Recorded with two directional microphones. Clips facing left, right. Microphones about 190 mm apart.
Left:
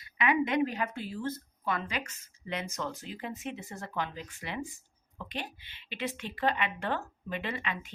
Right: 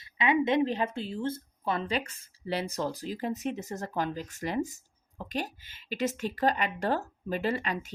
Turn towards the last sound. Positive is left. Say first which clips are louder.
# right 6 dB
turn(degrees=-40)  # may be behind; listen again after turning